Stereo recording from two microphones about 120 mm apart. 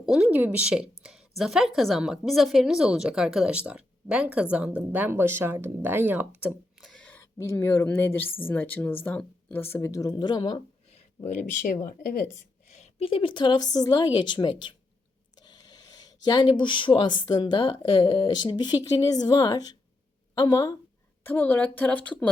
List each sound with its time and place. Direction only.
0.0 s speech: 5° right (ahead or behind)
1.0 s a sound: 5° right (ahead or behind)
1.4 s a woman's voice: 5° right (ahead or behind)
6.5 s a sound: centre (ahead or behind)
7.1 s a woman's voice: 20° left (ahead or behind); by 10.6 s 40° left (ahead or behind)
10.8 s speech: 70° left (ahead or behind); by 11.8 s 85° left
12.7 s a sound: 65° left (ahead or behind)
13.1 s a woman's voice: 45° left (ahead or behind); by 20.7 s 30° left (ahead or behind)
21.2 s speech: 15° left (ahead or behind)